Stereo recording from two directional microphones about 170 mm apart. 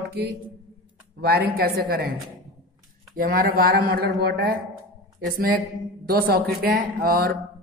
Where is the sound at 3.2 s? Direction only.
60° right (ahead or behind); by 4.6 s 75° right (ahead or behind).